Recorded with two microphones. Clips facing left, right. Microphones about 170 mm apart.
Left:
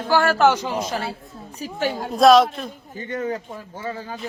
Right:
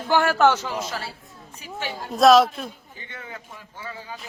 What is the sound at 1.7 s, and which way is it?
Speech, 45° left (ahead or behind).